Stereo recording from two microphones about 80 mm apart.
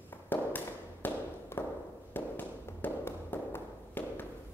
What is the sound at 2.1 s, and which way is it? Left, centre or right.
Tap, left.